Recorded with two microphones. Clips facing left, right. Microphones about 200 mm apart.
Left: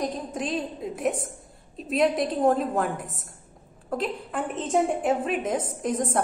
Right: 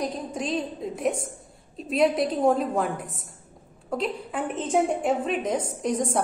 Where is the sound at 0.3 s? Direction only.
Centre (ahead or behind).